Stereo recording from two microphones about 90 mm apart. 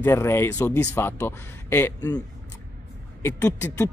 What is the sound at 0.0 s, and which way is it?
Speech, 30° left (ahead or behind).